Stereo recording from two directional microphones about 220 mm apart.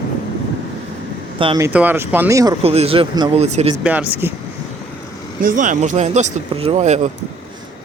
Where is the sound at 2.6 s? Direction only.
25° right (ahead or behind).